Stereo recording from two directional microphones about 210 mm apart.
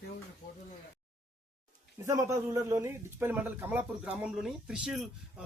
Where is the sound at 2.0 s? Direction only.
15° right (ahead or behind).